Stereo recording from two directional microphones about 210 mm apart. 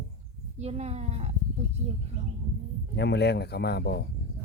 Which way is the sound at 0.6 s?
30° right (ahead or behind).